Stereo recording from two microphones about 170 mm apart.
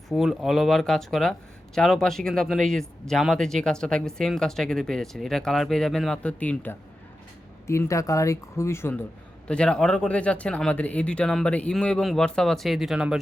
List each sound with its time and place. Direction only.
0.1 s speech: centre (ahead or behind)